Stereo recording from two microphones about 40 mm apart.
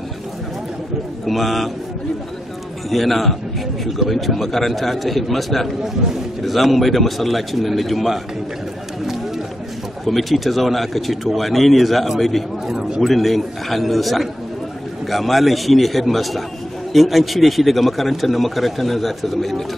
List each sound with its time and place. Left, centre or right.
1.2 s a man's voice: centre
2.9 s a man's voice: centre
10.0 s a man's voice: centre
12.6 s a man's voice: centre
13.0 s a man's voice: centre